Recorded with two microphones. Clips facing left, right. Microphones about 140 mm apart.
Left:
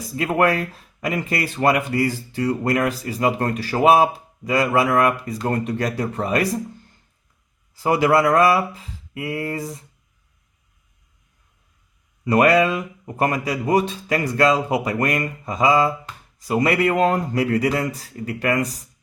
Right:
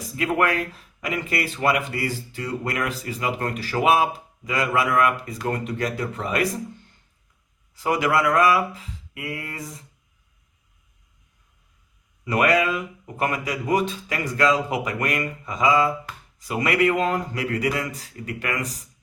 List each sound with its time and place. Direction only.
0.2 s speech: 35° left (ahead or behind)
7.8 s speech: 35° left (ahead or behind)
12.2 s speech: 35° left (ahead or behind)